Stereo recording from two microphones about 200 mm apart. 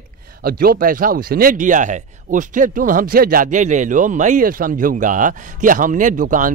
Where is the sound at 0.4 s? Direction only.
50° right (ahead or behind).